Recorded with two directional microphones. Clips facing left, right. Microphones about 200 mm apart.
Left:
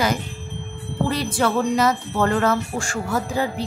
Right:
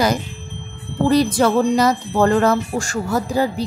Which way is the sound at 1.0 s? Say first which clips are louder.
Right 7 dB; 40° right (ahead or behind).